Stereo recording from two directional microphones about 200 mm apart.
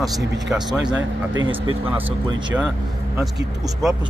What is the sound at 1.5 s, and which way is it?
Speech, 25° right (ahead or behind).